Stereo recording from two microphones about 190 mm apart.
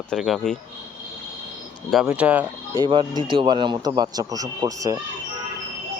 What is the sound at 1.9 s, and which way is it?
Speech, 5° right (ahead or behind).